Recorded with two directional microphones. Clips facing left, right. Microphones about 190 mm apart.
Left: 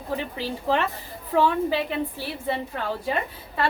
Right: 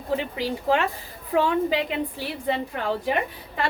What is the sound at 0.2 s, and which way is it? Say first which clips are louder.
A woman's voice: right 2 dB; 15° right (ahead or behind).